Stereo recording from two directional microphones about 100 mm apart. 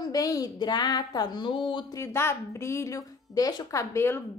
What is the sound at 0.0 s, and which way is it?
Speech, 40° left (ahead or behind).